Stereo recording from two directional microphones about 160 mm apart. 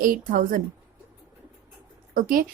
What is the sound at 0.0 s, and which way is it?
Speech, 60° right (ahead or behind).